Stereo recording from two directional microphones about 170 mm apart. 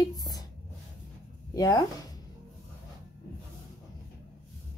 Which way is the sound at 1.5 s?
20° left (ahead or behind).